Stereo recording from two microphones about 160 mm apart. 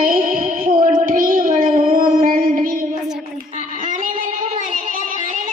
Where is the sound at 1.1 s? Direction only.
60° right (ahead or behind).